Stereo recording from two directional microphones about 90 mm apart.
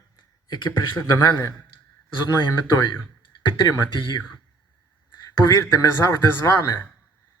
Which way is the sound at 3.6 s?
50° left (ahead or behind).